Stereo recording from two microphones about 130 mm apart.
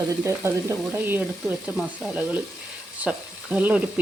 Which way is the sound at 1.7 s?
5° right (ahead or behind).